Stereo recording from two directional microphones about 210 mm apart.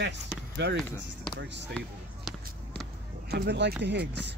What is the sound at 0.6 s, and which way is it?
Speech, 55° right (ahead or behind).